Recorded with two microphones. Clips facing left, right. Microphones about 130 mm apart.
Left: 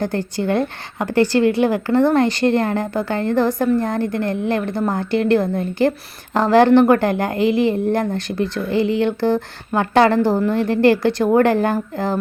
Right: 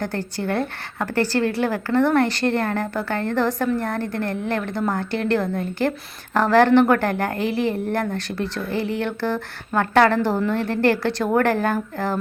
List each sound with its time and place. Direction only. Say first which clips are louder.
0.0 s a woman's voice: left 5 dB; 15° left (ahead or behind)